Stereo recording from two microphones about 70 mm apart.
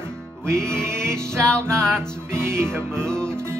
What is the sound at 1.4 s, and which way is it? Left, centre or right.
Music, centre.